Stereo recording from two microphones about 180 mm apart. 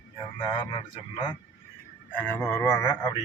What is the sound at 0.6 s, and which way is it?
Speech, 25° left (ahead or behind).